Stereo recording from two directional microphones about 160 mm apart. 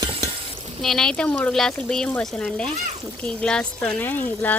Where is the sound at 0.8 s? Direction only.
Centre (ahead or behind).